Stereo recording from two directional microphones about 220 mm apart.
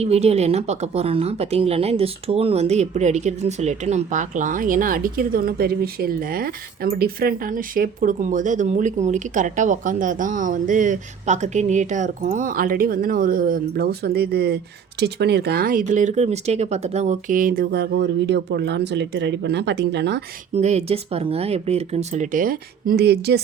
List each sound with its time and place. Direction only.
0.0 s a woman's voice: 30° right (ahead or behind); by 20.2 s 50° right (ahead or behind)
20.5 s speech: 30° right (ahead or behind); by 23.4 s 45° right (ahead or behind)